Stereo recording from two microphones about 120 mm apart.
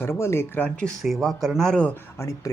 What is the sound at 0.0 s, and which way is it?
Speech, 20° left (ahead or behind).